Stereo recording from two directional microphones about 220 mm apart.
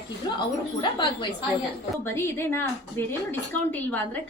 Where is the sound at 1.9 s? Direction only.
10° left (ahead or behind).